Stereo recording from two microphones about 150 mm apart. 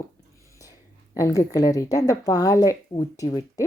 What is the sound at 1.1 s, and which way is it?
Speech, 20° left (ahead or behind).